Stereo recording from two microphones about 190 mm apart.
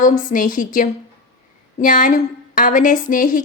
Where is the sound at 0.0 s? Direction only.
45° left (ahead or behind).